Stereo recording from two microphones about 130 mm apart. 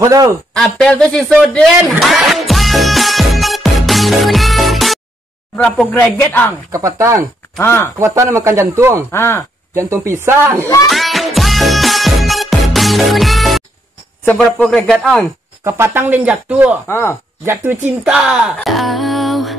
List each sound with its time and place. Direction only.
0.0 s speech: 25° right (ahead or behind)
0.6 s a sound: 5° left (ahead or behind)
5.6 s speech: 5° left (ahead or behind)
6.7 s speech: 25° right (ahead or behind)
7.5 s speech: 20° left (ahead or behind)
8.0 s speech: 25° right (ahead or behind)
9.1 s speech: 20° left (ahead or behind)
9.8 s speech: 20° right (ahead or behind)
10.9 s music: centre (ahead or behind)
14.2 s speech: 5° left (ahead or behind)
15.6 s speech: 20° right (ahead or behind)
16.8 s speech: 20° left (ahead or behind)
18.0 s speech: 5° right (ahead or behind)